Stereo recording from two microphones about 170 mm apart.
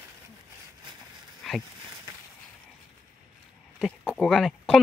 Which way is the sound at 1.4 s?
Centre (ahead or behind).